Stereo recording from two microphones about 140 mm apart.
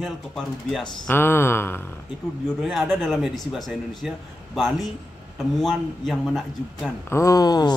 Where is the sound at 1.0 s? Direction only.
15° left (ahead or behind).